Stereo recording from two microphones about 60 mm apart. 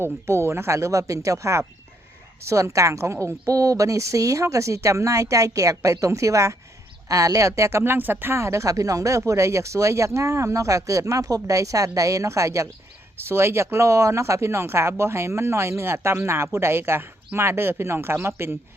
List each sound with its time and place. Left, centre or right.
0.0 s a woman's voice: right
7.9 s speech: right
8.4 s a woman's voice: right
13.2 s speech: right